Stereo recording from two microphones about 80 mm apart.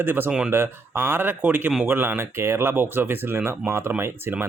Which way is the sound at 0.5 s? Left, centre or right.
Right.